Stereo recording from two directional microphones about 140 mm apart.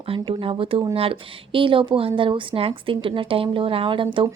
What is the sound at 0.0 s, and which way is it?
Speech, 40° right (ahead or behind).